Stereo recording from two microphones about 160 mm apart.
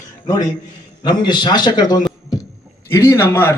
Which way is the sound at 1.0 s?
25° left (ahead or behind).